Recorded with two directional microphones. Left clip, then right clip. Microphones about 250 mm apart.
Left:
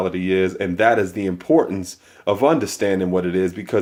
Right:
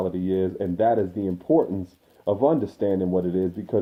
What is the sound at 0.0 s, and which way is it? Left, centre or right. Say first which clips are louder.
Speech: left 5 dB; left.